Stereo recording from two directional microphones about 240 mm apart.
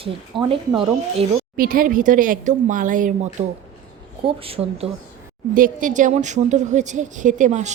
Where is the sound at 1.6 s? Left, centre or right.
Right.